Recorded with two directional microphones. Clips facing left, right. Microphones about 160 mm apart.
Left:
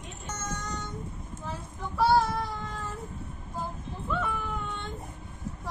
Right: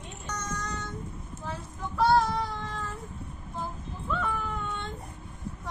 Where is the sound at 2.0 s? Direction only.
Centre (ahead or behind).